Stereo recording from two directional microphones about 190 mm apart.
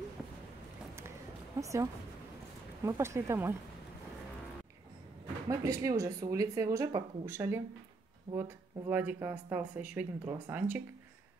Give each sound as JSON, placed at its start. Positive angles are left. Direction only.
{"t": 1.6, "sound": "speech", "side_deg": -15}
{"t": 5.5, "sound": "speech", "side_deg": -15}